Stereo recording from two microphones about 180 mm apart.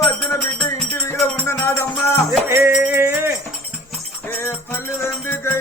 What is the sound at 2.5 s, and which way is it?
Music, 15° right (ahead or behind).